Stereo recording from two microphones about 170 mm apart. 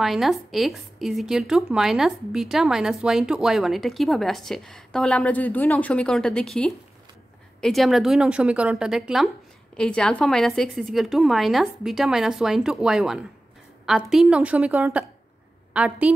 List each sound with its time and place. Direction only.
0.0 s a woman's voice: centre (ahead or behind)